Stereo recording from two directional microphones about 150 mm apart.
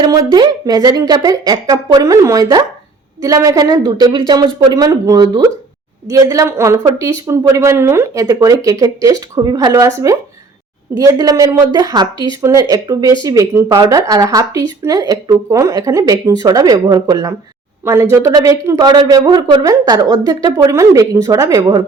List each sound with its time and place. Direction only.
0.0 s speech: 30° right (ahead or behind)